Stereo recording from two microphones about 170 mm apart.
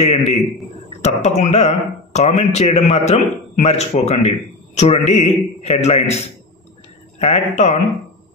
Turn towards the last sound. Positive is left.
turn(degrees=40)  # may be behind; listen again after turning